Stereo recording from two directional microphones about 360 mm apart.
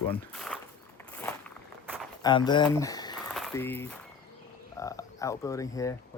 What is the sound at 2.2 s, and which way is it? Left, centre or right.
Speech, centre.